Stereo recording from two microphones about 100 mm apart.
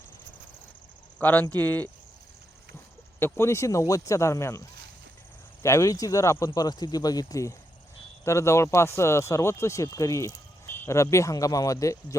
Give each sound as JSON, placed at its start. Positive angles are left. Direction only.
{"t": 1.2, "sound": "speech", "side_deg": 15}
{"t": 3.2, "sound": "speech", "side_deg": 25}
{"t": 5.6, "sound": "speech", "side_deg": 30}